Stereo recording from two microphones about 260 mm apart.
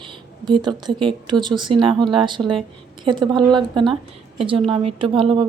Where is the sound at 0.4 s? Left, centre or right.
Centre.